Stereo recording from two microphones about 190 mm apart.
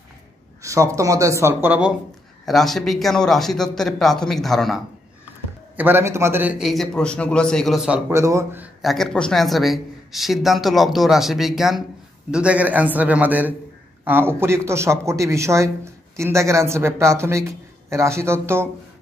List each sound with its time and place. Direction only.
0.6 s a man's voice: 15° right (ahead or behind); by 4.8 s centre (ahead or behind)
5.8 s speech: 10° right (ahead or behind)
8.1 s a man's voice: 15° right (ahead or behind)
8.8 s a man's voice: centre (ahead or behind)